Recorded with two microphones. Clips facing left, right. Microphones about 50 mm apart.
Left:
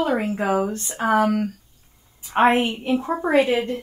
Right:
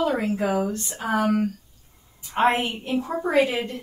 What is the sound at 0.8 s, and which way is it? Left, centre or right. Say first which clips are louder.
Speech: left 5 dB; left.